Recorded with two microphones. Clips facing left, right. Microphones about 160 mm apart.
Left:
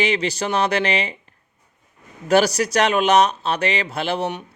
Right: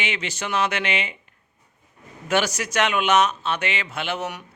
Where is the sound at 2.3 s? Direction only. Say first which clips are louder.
Left 6 dB; 35° left (ahead or behind).